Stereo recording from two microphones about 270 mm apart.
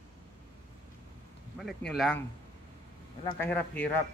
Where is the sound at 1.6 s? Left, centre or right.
Centre.